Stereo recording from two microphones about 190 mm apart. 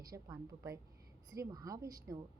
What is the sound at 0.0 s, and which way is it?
A woman's voice, 20° right (ahead or behind).